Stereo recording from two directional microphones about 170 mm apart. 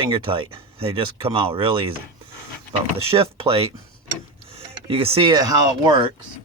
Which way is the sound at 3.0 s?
35° right (ahead or behind).